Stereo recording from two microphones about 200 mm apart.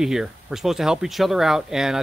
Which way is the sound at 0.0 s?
Centre (ahead or behind).